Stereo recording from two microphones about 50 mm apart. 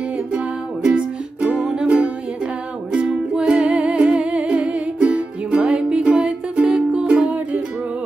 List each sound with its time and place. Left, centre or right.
0.3 s music: centre
2.9 s music: centre